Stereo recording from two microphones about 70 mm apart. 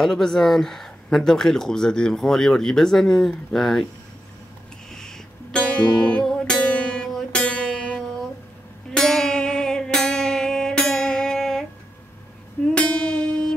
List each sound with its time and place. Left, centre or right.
0.0 s speech: centre
4.9 s music: centre
12.7 s music: centre